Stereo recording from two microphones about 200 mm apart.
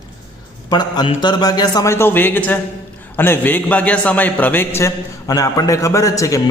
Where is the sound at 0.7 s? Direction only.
20° left (ahead or behind).